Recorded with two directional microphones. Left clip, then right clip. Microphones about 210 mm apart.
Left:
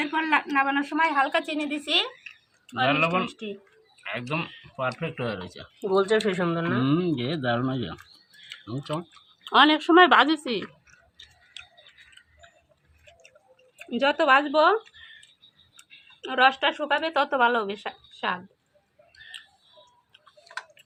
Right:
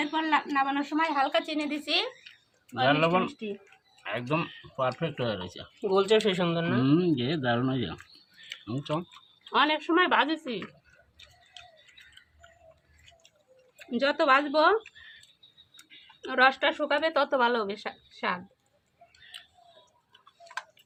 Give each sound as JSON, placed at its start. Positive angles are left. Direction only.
{"t": 0.0, "sound": "speech", "side_deg": 20}
{"t": 2.8, "sound": "speech", "side_deg": -30}
{"t": 5.8, "sound": "speech", "side_deg": 5}
{"t": 9.4, "sound": "speech", "side_deg": 55}
{"t": 13.7, "sound": "speech", "side_deg": 15}